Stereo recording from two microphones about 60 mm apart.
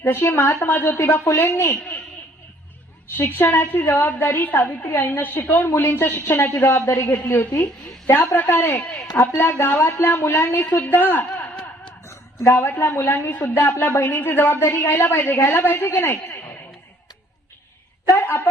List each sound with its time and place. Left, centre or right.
0.0 s a woman's voice: left
0.9 s a woman's voice: left
3.2 s a woman's voice: left
7.1 s a woman's voice: left
7.5 s a woman's voice: left
12.6 s a woman's voice: left
14.6 s a woman's voice: left
18.2 s a woman's voice: left